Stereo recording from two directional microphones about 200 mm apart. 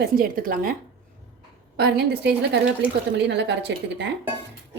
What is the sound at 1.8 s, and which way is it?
A woman's voice, 55° right (ahead or behind).